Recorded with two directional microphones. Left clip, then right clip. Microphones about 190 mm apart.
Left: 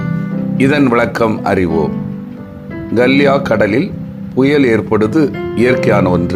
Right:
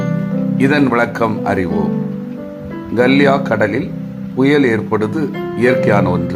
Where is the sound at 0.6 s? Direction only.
20° left (ahead or behind).